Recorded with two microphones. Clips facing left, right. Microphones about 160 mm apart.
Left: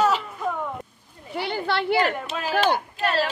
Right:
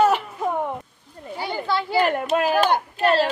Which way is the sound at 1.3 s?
70° left (ahead or behind).